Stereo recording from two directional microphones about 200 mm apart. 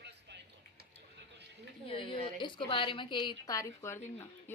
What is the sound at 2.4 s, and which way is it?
A woman's voice, 25° left (ahead or behind).